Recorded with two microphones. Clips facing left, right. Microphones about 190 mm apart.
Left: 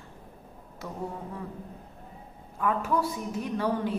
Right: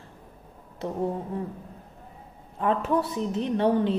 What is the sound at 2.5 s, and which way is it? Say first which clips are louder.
A woman's voice: right 3 dB; 25° right (ahead or behind).